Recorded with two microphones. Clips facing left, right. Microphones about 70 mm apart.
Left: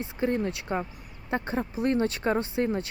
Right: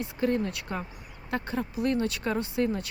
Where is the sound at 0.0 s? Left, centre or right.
Left.